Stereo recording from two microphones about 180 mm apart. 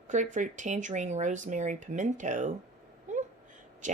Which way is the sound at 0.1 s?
45° right (ahead or behind).